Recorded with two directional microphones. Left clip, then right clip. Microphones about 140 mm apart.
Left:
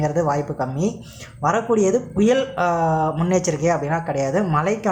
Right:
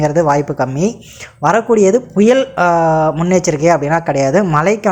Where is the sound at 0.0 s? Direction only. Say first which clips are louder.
Right 8 dB; 40° right (ahead or behind).